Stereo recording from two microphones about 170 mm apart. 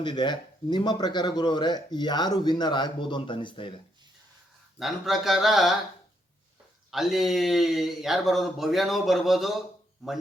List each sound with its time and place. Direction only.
0.0 s speech: 25° left (ahead or behind)
4.8 s speech: centre (ahead or behind)
6.9 s speech: centre (ahead or behind)